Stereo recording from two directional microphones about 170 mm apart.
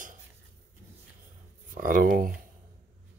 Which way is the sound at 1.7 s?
55° right (ahead or behind).